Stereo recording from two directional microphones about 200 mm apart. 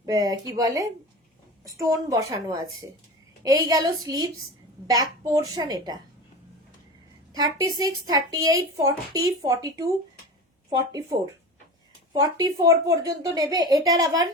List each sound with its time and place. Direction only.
0.0 s a woman's voice: 20° right (ahead or behind)
7.3 s a woman's voice: 20° right (ahead or behind)
12.1 s speech: 15° right (ahead or behind)